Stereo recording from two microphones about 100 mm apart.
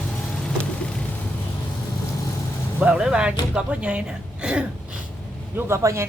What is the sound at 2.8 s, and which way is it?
Speech, 10° right (ahead or behind).